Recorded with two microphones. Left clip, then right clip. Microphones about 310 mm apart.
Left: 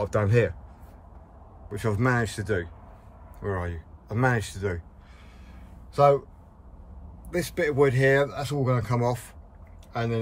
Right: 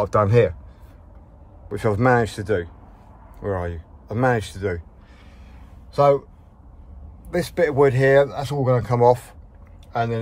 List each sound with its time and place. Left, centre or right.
0.0 s speech: centre
1.7 s speech: centre
5.9 s speech: centre
7.2 s speech: centre